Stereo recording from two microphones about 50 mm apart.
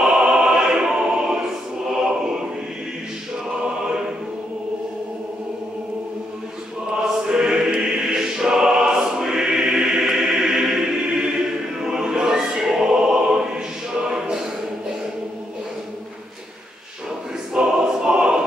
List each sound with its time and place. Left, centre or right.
0.0 s opera: centre
2.0 s a sound: centre
7.0 s choir: centre
11.8 s choir: centre
14.0 s music: centre
17.6 s opera: centre